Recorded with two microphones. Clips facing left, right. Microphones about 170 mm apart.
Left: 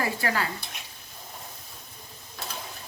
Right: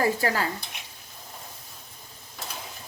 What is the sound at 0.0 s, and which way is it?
Speech, 40° right (ahead or behind).